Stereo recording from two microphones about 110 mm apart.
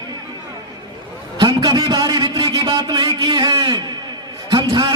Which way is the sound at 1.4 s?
40° right (ahead or behind).